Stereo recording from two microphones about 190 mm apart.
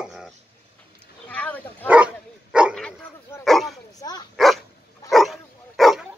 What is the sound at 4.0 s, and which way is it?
Dog, 20° left (ahead or behind).